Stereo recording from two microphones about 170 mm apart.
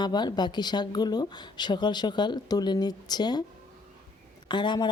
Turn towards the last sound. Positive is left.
turn(degrees=25)  # may be behind; listen again after turning